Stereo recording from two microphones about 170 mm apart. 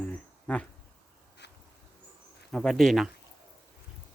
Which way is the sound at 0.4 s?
5° left (ahead or behind).